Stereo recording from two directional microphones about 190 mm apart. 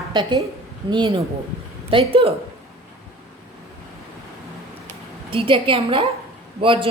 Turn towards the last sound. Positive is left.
turn(degrees=-25)  # may be behind; listen again after turning